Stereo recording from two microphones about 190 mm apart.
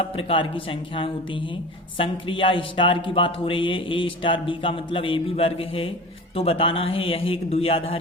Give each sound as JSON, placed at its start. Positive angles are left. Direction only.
{"t": 0.0, "sound": "speech", "side_deg": 30}